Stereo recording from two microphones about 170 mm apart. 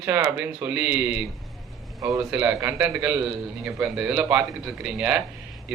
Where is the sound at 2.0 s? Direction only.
20° right (ahead or behind).